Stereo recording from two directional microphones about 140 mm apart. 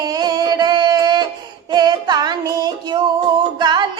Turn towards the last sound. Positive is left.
turn(degrees=-30)  # may be behind; listen again after turning